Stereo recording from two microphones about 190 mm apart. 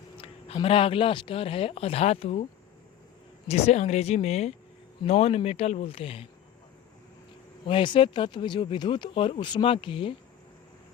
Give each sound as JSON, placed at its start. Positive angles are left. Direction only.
{"t": 0.2, "sound": "speech", "side_deg": 30}
{"t": 7.7, "sound": "speech", "side_deg": 25}